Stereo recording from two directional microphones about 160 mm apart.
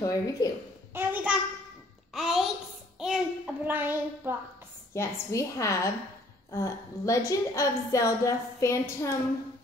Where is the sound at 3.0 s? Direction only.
5° right (ahead or behind).